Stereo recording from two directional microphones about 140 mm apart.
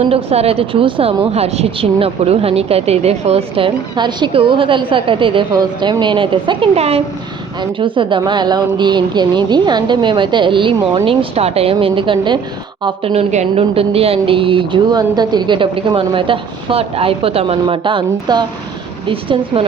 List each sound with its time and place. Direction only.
0.1 s a woman's voice: 45° right (ahead or behind)
13.3 s a woman's voice: 50° right (ahead or behind)